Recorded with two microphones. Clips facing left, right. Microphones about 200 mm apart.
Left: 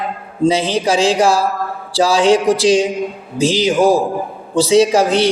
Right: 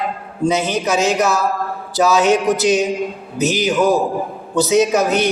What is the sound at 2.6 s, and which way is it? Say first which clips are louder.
A man's voice: left 3 dB; 30° left (ahead or behind).